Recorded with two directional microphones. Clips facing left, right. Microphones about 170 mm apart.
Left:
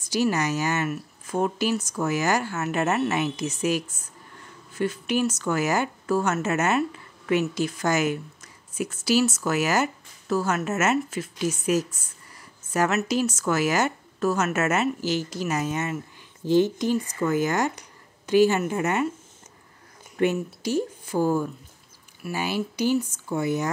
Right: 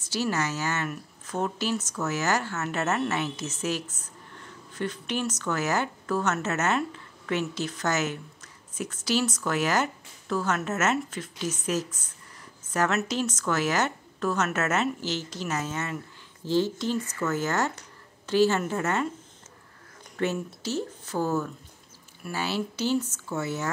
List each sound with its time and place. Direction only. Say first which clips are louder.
0.0 s speech: left 4 dB; 15° left (ahead or behind)
20.2 s speech: left 5 dB; 15° left (ahead or behind)